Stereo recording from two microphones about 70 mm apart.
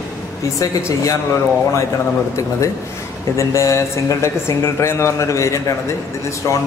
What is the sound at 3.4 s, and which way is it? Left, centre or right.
A man's voice, left.